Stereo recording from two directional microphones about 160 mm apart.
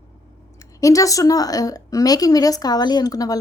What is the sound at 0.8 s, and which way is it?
Speech, 20° left (ahead or behind).